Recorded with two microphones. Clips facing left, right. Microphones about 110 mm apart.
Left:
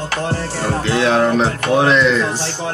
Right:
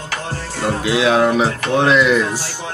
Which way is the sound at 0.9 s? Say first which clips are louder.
Even; 5° right (ahead or behind).